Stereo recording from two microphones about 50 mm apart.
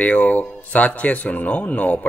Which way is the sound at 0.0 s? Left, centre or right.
Left.